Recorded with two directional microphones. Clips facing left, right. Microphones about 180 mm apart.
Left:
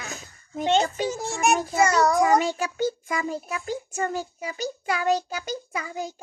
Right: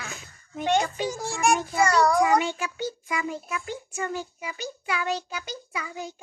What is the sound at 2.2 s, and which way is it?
A child's voice, 40° left (ahead or behind).